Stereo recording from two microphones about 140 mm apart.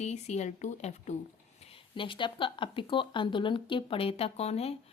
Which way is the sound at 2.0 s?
35° left (ahead or behind).